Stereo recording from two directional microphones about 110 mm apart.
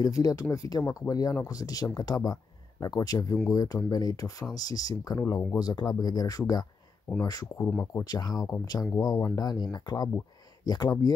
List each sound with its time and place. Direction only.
0.0 s speech: 35° left (ahead or behind)
7.1 s speech: 5° left (ahead or behind)
7.5 s speech: 20° left (ahead or behind)
8.0 s speech: 40° left (ahead or behind)